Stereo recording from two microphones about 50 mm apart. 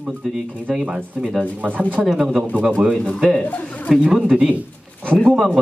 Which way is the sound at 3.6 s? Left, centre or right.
Left.